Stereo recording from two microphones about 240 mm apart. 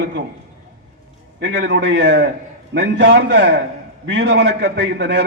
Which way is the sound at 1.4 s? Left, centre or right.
Right.